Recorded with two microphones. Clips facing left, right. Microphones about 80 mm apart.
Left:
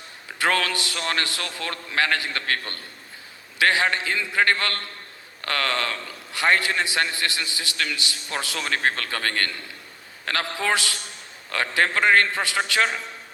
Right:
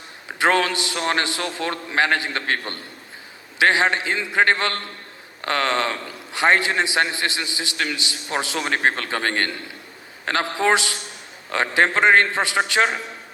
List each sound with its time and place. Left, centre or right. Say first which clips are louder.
0.3 s a man's voice: right 4 dB; right